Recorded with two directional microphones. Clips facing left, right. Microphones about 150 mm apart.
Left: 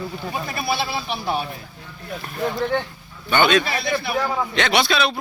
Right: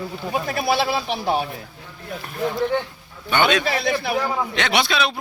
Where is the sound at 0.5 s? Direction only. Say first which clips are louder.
Right 4 dB; 90° right.